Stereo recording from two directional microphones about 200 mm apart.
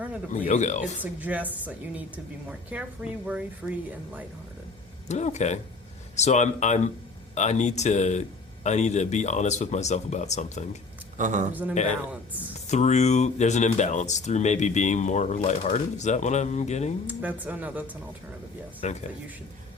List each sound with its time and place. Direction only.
0.4 s speech: 35° left (ahead or behind)
1.0 s speech: 10° right (ahead or behind)
5.0 s speech: 35° left (ahead or behind)
11.2 s speech: 40° right (ahead or behind)
12.6 s speech: 35° left (ahead or behind)
17.1 s speech: 10° right (ahead or behind)
18.8 s speech: 35° left (ahead or behind)